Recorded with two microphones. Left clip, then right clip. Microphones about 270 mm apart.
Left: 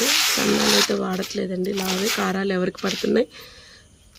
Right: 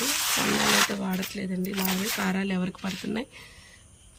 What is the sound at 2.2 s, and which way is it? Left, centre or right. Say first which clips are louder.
Speech: left 7 dB; centre.